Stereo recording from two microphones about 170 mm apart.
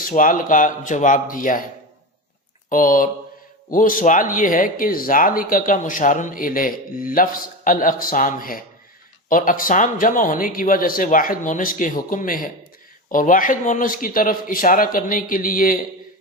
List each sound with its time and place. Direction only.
0.0 s speech: 55° left (ahead or behind)
2.6 s speech: 50° left (ahead or behind)